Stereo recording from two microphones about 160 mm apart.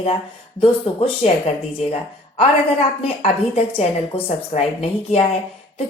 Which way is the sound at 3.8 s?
40° left (ahead or behind).